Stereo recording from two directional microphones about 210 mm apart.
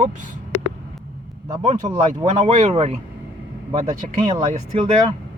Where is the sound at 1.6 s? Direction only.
30° right (ahead or behind).